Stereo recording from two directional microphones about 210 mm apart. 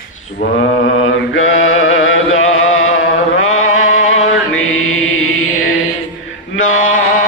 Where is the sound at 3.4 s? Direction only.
75° left (ahead or behind).